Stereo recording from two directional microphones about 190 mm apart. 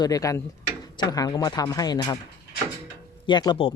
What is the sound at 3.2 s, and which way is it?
Speech, 25° left (ahead or behind).